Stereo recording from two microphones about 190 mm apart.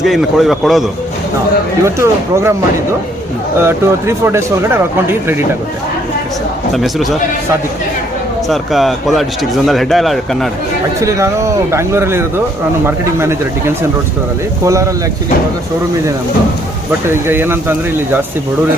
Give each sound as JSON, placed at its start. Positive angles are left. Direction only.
{"t": 0.0, "sound": "speech", "side_deg": 0}
{"t": 1.8, "sound": "speech", "side_deg": -15}
{"t": 3.6, "sound": "speech", "side_deg": -15}
{"t": 6.7, "sound": "speech", "side_deg": 0}
{"t": 8.4, "sound": "speech", "side_deg": 0}
{"t": 11.0, "sound": "speech", "side_deg": -15}
{"t": 17.1, "sound": "speech", "side_deg": -10}